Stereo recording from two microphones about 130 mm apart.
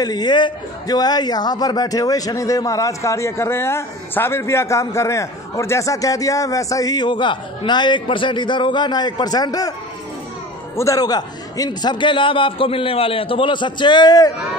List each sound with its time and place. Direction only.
0.0 s a man's voice: 30° left (ahead or behind)
10.8 s a man's voice: 25° left (ahead or behind)